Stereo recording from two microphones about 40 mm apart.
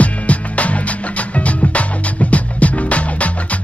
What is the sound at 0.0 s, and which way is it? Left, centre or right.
Music, left.